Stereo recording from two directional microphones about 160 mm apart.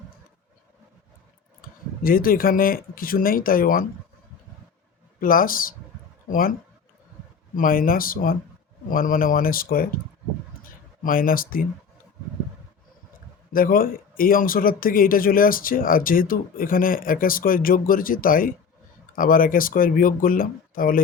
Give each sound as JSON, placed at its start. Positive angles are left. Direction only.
{"t": 2.0, "sound": "speech", "side_deg": 65}
{"t": 5.2, "sound": "speech", "side_deg": 60}
{"t": 7.5, "sound": "speech", "side_deg": 60}
{"t": 11.0, "sound": "speech", "side_deg": 60}
{"t": 13.5, "sound": "speech", "side_deg": 60}